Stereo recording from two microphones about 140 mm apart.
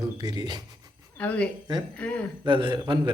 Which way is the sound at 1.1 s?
10° left (ahead or behind).